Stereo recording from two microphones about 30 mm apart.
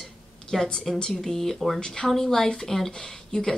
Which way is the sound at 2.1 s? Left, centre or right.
Centre.